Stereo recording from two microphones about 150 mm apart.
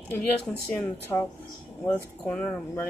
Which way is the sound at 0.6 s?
10° left (ahead or behind).